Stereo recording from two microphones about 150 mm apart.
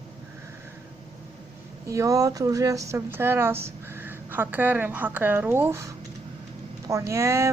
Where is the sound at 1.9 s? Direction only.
20° right (ahead or behind).